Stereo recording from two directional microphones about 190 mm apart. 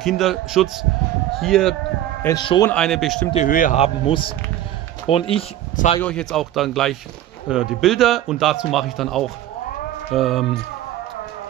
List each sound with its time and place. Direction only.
0.0 s speech: centre (ahead or behind)
2.2 s a man's voice: 25° left (ahead or behind)
2.7 s speech: 5° left (ahead or behind)
3.3 s speech: 45° left (ahead or behind)
3.7 s a man's voice: 30° left (ahead or behind)
5.9 s speech: 5° left (ahead or behind)